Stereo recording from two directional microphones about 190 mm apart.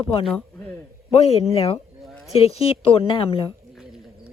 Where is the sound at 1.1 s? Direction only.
35° left (ahead or behind).